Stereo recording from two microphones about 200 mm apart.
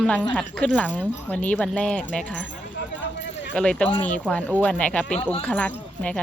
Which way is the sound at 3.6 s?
5° left (ahead or behind).